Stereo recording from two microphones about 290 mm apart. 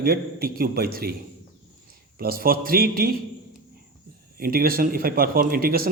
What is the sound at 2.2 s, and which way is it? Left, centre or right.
Speech, right.